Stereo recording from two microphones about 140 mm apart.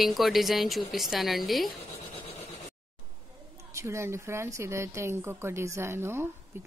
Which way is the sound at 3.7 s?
20° right (ahead or behind).